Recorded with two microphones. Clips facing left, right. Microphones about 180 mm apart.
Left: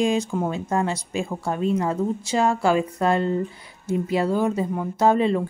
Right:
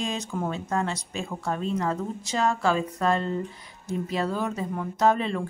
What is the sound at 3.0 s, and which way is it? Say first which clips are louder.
Speech: left 3 dB; 10° left (ahead or behind).